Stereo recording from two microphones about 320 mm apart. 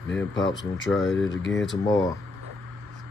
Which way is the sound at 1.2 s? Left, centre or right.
Left.